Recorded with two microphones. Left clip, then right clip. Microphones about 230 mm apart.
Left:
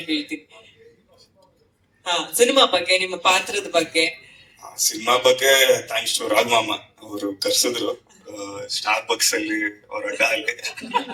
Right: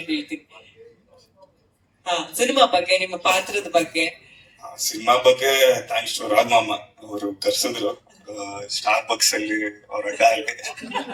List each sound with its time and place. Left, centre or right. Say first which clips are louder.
2.0 s a man's voice: left 3 dB; left